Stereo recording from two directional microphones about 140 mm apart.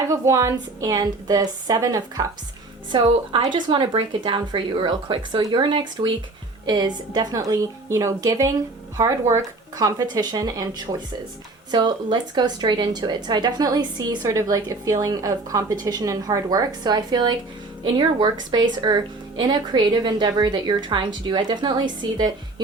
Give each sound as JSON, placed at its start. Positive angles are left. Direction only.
{"t": 0.1, "sound": "a woman's voice", "side_deg": -25}
{"t": 11.7, "sound": "a woman's voice", "side_deg": -35}